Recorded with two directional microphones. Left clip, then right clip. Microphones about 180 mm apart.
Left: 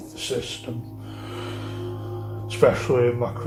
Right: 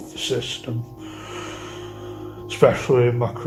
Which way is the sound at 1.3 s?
35° right (ahead or behind).